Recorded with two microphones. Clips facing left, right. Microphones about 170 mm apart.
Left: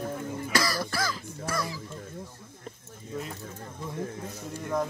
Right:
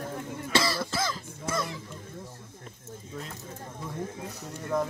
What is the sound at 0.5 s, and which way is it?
Throat clearing, 25° right (ahead or behind).